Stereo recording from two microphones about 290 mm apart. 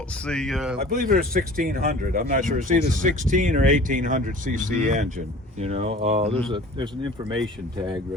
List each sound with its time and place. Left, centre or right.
0.3 s speech: centre
0.9 s speech: right